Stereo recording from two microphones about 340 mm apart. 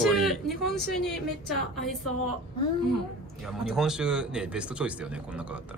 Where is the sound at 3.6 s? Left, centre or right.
Centre.